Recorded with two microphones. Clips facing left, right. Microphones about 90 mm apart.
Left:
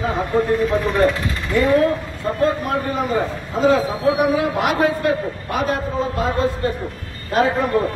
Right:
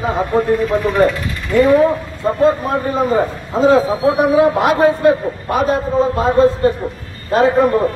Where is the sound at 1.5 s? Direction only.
25° right (ahead or behind).